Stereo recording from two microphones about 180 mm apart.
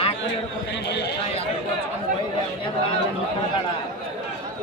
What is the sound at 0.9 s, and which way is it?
Speech, 70° left (ahead or behind).